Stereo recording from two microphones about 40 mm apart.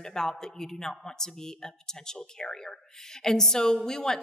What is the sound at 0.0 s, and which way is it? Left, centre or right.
A woman's voice, centre.